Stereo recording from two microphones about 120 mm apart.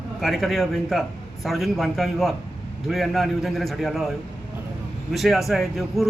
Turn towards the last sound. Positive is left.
turn(degrees=0)  # may be behind; listen again after turning